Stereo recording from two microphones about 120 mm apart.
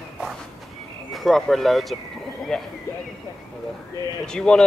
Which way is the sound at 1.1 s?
Centre (ahead or behind).